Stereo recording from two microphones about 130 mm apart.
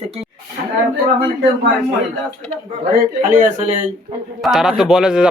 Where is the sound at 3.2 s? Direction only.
85° right.